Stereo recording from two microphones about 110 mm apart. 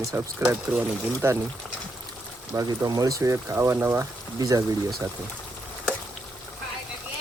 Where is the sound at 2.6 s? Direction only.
35° right (ahead or behind).